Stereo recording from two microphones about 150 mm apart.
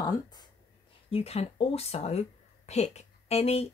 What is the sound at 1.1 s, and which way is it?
Speech, 40° left (ahead or behind).